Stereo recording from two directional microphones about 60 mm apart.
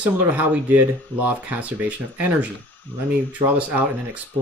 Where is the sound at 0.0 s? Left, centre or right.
Right.